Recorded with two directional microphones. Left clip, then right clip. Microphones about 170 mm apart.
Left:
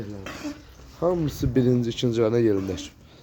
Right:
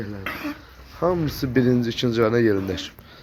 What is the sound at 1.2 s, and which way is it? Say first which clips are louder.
A man's voice: right 2 dB; 15° left (ahead or behind).